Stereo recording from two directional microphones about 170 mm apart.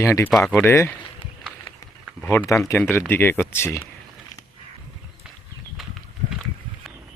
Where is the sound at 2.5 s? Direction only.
15° left (ahead or behind).